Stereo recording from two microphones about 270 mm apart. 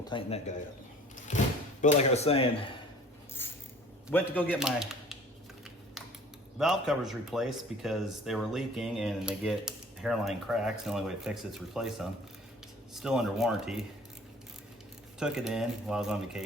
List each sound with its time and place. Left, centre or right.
0.1 s speech: left
1.3 s a sound: left
1.8 s speech: left
3.4 s a sound: centre
4.1 s speech: centre
6.6 s speech: centre
15.2 s speech: centre